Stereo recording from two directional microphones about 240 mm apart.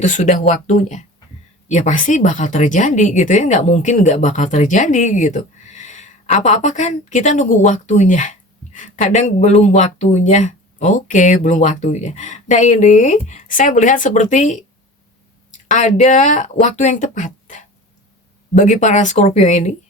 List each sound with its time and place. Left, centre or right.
0.0 s speech: left